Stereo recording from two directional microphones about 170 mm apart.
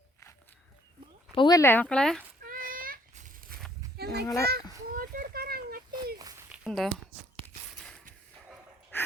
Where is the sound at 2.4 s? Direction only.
55° right (ahead or behind).